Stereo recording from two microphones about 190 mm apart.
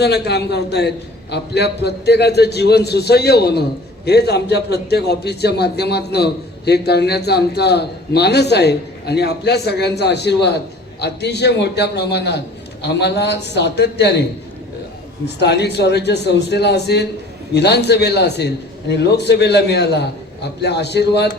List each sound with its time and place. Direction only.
0.0 s a man's voice: 60° left (ahead or behind)
15.4 s a man's voice: 60° left (ahead or behind)